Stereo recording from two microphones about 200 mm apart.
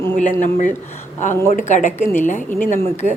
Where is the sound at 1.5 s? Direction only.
35° left (ahead or behind).